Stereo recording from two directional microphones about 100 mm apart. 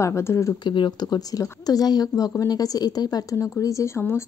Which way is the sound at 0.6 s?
50° left (ahead or behind).